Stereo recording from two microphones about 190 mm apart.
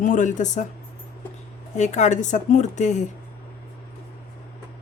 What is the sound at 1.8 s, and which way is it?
Speech, 40° left (ahead or behind).